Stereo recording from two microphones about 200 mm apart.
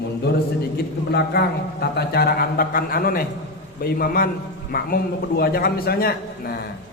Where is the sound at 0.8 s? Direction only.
55° left (ahead or behind).